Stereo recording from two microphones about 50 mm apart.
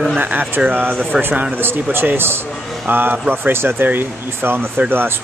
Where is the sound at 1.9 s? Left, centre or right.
Right.